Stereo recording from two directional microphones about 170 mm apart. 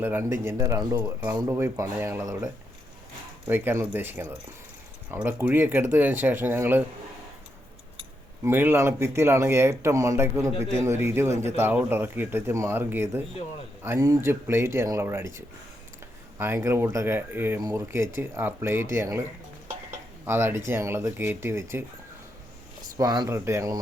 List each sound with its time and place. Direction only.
0.0 s speech: 15° right (ahead or behind)
8.4 s speech: 10° right (ahead or behind)
20.2 s speech: 15° right (ahead or behind)
23.0 s speech: 20° right (ahead or behind)